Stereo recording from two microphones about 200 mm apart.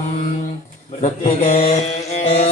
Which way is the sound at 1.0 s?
35° left (ahead or behind).